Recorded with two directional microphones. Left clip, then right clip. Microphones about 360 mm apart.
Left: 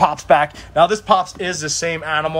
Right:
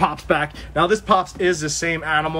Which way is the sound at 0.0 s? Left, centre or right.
Centre.